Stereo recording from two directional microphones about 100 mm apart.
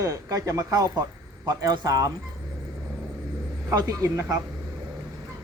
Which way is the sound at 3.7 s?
35° right (ahead or behind).